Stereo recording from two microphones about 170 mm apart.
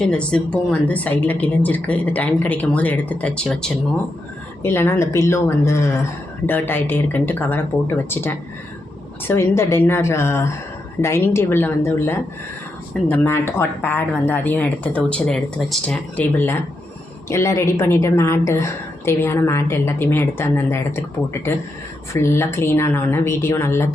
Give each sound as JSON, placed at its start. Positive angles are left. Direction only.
{"t": 0.0, "sound": "a woman's voice", "side_deg": 5}
{"t": 22.1, "sound": "a woman's voice", "side_deg": 15}